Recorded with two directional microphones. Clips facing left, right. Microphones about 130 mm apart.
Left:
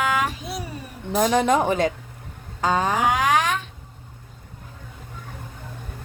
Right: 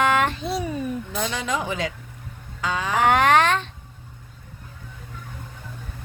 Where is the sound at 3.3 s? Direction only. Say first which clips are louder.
Right 3 dB; 10° left (ahead or behind).